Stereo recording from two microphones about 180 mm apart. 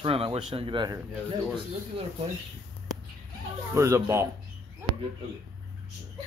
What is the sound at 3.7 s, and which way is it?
Speech, 15° right (ahead or behind).